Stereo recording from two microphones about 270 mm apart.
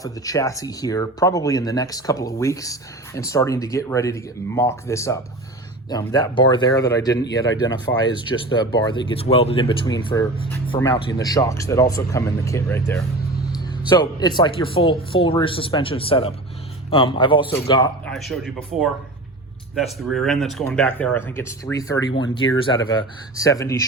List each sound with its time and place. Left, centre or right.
0.0 s speech: centre
14.0 s speech: centre
18.0 s speech: centre